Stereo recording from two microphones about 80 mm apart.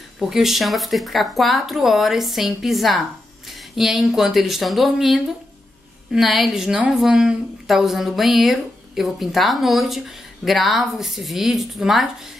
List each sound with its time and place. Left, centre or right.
0.2 s a woman's voice: centre